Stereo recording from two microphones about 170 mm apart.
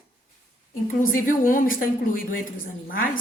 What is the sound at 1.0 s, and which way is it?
A woman's voice, 55° left (ahead or behind).